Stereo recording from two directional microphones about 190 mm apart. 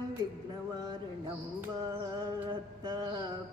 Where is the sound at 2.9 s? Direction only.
20° right (ahead or behind).